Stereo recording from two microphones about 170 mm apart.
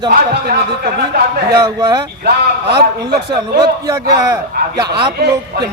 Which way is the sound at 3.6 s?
20° right (ahead or behind).